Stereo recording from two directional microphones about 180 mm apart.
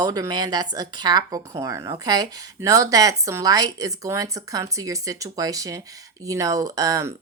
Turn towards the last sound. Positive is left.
turn(degrees=-15)  # may be behind; listen again after turning